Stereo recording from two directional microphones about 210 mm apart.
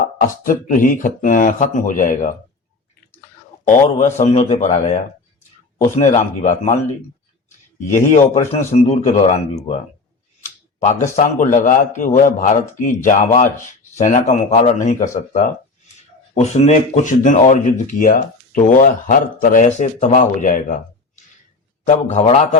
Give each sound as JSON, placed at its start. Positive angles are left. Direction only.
{"t": 0.4, "sound": "speech", "side_deg": 40}
{"t": 3.7, "sound": "speech", "side_deg": 30}
{"t": 7.9, "sound": "speech", "side_deg": 30}
{"t": 11.0, "sound": "speech", "side_deg": 35}
{"t": 21.8, "sound": "speech", "side_deg": 30}